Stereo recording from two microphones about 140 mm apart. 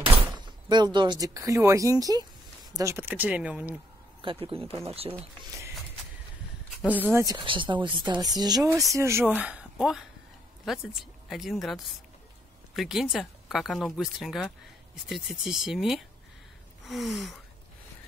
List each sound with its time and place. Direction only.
0.0 s speech: 30° right (ahead or behind); by 3.8 s 10° right (ahead or behind)
4.2 s speech: 40° right (ahead or behind)
6.9 s speech: 15° right (ahead or behind)
7.2 s speech: 35° right (ahead or behind); by 9.2 s 20° right (ahead or behind)
9.2 s speech: 10° right (ahead or behind)